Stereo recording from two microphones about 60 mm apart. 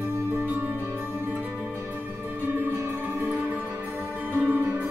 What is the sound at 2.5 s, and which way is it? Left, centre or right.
Music, right.